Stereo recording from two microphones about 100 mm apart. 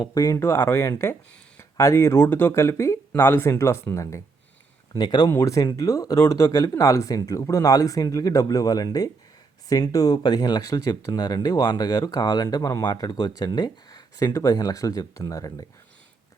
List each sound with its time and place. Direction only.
0.0 s speech: 40° left (ahead or behind)
4.9 s speech: 45° left (ahead or behind)
5.3 s speech: 30° left (ahead or behind)